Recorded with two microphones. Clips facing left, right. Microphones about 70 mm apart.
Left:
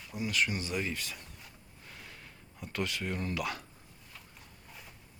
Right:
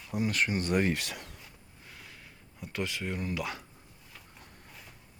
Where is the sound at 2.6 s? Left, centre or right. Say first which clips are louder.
Even; centre.